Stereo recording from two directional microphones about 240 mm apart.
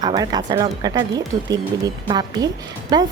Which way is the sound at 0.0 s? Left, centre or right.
Centre.